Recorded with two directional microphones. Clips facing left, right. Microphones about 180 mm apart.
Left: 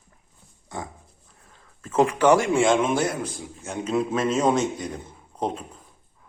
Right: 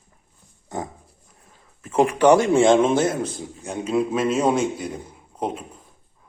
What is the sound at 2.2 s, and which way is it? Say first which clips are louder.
Speech: right 5 dB; 20° right (ahead or behind).